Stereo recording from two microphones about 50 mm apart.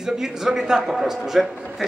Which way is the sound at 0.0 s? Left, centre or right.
Centre.